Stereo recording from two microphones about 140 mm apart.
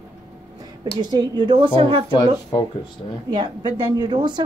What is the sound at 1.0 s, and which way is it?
A woman's voice, 30° right (ahead or behind).